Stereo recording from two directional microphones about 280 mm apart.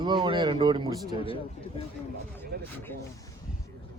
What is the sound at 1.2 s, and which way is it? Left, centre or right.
Speech, centre.